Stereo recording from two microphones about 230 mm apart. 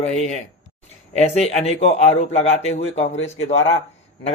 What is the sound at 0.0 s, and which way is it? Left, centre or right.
A man's voice, left.